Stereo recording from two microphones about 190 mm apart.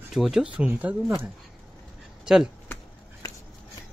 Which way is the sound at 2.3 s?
5° right (ahead or behind).